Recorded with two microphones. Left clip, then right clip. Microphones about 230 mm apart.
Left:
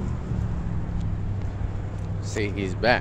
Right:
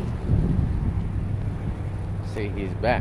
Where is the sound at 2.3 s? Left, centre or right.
Centre.